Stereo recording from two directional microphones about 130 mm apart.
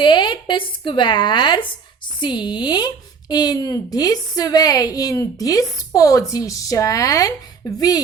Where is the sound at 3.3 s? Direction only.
30° left (ahead or behind).